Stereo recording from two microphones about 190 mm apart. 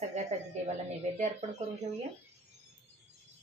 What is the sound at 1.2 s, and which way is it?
Speech, 40° right (ahead or behind).